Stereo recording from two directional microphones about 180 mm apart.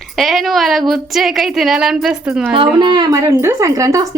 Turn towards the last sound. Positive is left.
turn(degrees=-20)  # may be behind; listen again after turning